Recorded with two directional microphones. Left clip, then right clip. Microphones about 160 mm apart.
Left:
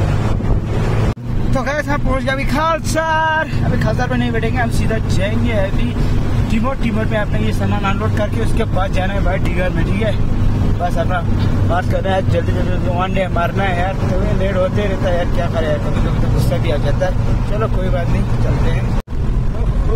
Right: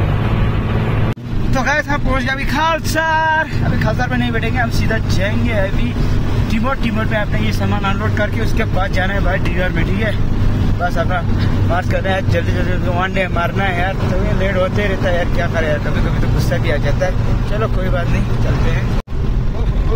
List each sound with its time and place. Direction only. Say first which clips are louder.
1.5 s speech: right 2 dB; 15° left (ahead or behind)
8.2 s speech: right 1 dB; 20° left (ahead or behind)
11.7 s speech: left 1 dB; 20° left (ahead or behind)
12.9 s speech: even; 5° left (ahead or behind)
16.3 s speech: right 1 dB; 20° left (ahead or behind)